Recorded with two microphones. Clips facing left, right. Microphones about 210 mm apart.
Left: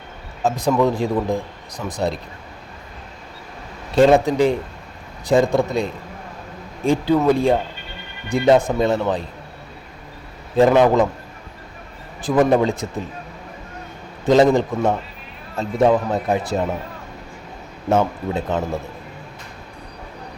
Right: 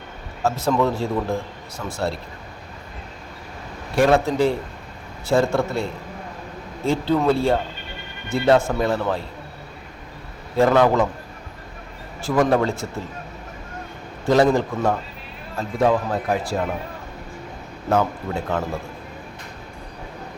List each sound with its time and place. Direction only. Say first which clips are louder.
0.4 s speech: left 2 dB; 15° left (ahead or behind)
3.9 s speech: left 4 dB; 20° left (ahead or behind)
10.6 s speech: left 3 dB; 20° left (ahead or behind)
12.5 s speech: left 3 dB; 15° left (ahead or behind)
14.3 s a man's voice: left 3 dB; 20° left (ahead or behind)
17.8 s a man's voice: left 2 dB; 20° left (ahead or behind)